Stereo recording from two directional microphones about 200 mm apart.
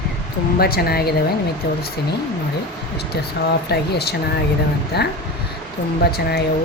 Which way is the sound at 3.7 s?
55° left (ahead or behind).